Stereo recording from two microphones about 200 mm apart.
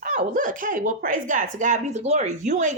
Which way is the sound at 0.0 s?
40° right (ahead or behind).